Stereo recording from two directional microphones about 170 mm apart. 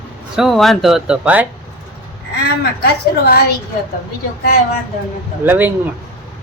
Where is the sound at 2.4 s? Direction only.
70° left (ahead or behind).